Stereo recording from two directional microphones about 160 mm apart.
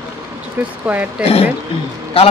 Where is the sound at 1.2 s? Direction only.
40° left (ahead or behind).